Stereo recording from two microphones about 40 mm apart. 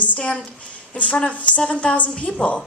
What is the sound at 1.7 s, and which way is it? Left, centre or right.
Speech, left.